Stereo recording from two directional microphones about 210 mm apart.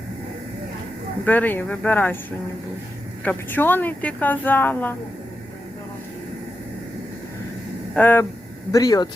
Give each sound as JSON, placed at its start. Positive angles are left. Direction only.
{"t": 1.2, "sound": "speech", "side_deg": 10}
{"t": 3.2, "sound": "speech", "side_deg": 10}
{"t": 7.9, "sound": "speech", "side_deg": 10}